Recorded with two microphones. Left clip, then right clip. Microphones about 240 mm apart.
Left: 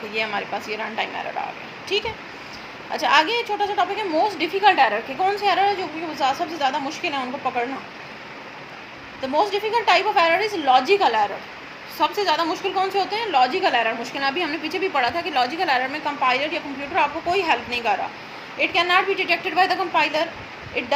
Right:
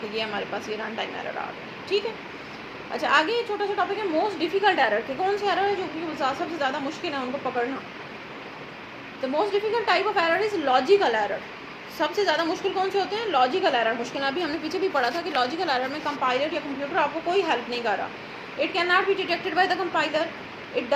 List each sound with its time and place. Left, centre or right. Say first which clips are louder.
0.1 s a woman's voice: left 6 dB; left
9.3 s a woman's voice: left 4 dB; left